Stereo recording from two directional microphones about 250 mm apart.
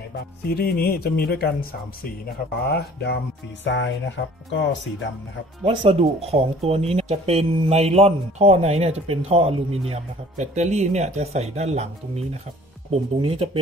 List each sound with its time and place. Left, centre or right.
0.1 s speech: left
3.6 s music: left
5.7 s speech: right
12.9 s speech: right